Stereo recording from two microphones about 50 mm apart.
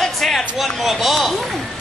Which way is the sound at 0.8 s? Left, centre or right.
Centre.